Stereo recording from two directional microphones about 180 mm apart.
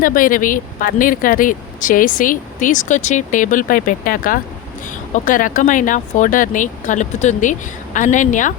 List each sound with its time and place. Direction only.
0.0 s speech: 50° left (ahead or behind)